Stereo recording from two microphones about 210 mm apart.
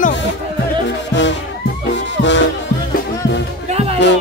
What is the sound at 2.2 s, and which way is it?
Music, 60° left (ahead or behind).